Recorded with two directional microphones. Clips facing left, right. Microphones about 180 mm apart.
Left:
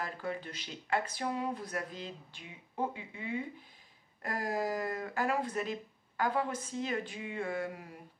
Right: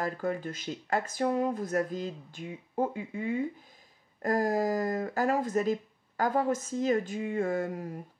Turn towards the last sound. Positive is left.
turn(degrees=-45)  # may be behind; listen again after turning